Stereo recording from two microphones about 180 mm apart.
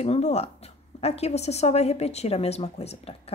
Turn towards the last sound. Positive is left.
turn(degrees=35)  # may be behind; listen again after turning